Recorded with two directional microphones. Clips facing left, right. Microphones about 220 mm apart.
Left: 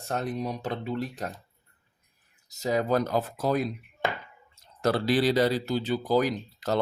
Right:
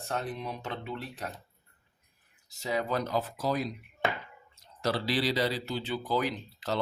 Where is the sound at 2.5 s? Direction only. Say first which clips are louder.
Left 6 dB; 40° left (ahead or behind).